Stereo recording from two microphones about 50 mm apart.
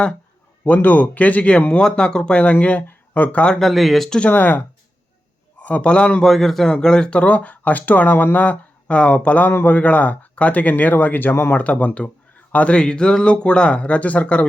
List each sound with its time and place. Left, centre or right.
0.6 s speech: left
3.6 s a man's voice: centre
4.3 s speech: left
5.5 s a man's voice: left
6.2 s a man's voice: centre
6.7 s speech: centre